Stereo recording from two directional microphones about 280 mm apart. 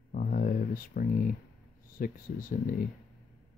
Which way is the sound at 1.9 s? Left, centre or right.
Left.